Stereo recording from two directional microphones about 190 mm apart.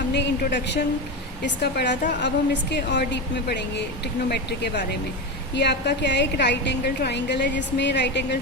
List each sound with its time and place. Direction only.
0.1 s a woman's voice: 65° left (ahead or behind)